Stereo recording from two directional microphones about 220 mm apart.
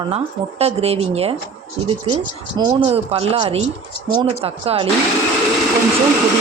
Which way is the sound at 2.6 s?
25° right (ahead or behind).